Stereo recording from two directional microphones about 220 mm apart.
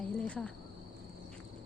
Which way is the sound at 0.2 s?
5° left (ahead or behind).